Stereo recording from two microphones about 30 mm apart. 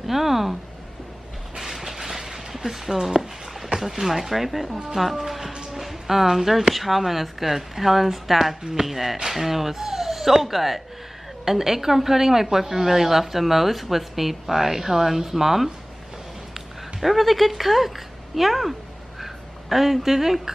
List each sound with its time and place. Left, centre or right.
0.0 s speech: centre
1.6 s train: centre
2.0 s a sound: centre
4.9 s speech: centre
5.5 s music: right
5.8 s speech: centre
16.5 s a sound: centre